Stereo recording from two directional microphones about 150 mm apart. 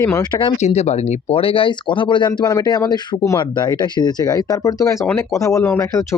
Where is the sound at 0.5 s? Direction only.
50° left (ahead or behind).